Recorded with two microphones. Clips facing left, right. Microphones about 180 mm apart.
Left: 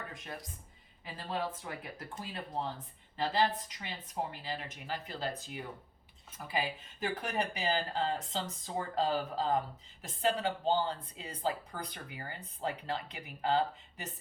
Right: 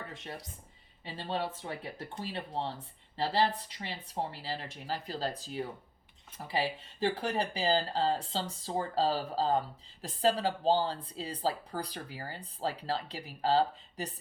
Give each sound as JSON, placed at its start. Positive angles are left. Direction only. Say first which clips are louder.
{"t": 0.1, "sound": "speech", "louder": "right 1 dB", "side_deg": -30}